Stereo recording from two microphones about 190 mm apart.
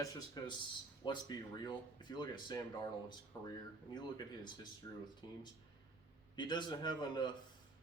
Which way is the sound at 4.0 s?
25° left (ahead or behind).